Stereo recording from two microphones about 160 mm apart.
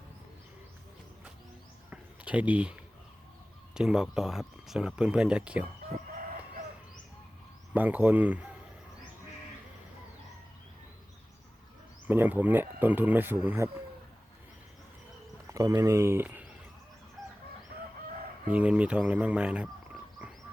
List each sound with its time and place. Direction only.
1.9 s a sound: 10° right (ahead or behind)
3.8 s speech: 5° right (ahead or behind)
7.7 s speech: 10° right (ahead or behind)
12.0 s speech: 10° right (ahead or behind)
15.5 s speech: 20° right (ahead or behind)
17.2 s chicken: centre (ahead or behind)
18.5 s speech: 5° right (ahead or behind)